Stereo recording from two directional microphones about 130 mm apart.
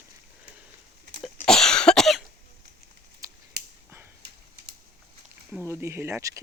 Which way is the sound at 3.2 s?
25° right (ahead or behind).